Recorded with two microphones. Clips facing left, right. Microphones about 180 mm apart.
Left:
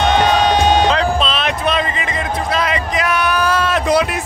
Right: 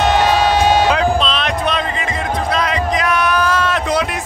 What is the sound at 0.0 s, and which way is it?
Music, 5° right (ahead or behind).